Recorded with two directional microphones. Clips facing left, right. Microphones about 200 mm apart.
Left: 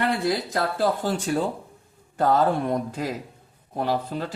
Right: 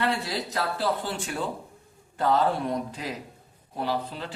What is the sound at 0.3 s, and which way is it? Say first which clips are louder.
Speech: left 5 dB; 50° left (ahead or behind).